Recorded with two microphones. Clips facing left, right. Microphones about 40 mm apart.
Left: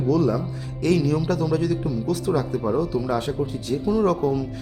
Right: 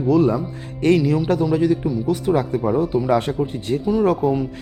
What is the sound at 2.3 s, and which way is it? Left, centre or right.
Speech, right.